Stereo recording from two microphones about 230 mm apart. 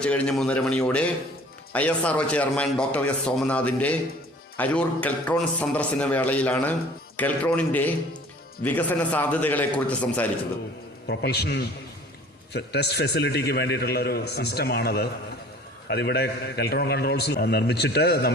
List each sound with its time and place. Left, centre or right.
0.0 s a man's voice: centre
11.1 s a man's voice: left